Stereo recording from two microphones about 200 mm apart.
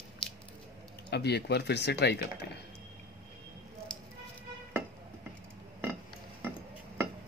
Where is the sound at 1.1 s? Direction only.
55° left (ahead or behind).